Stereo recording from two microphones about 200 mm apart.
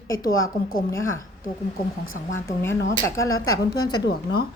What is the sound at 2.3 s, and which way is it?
A woman's voice, 10° left (ahead or behind).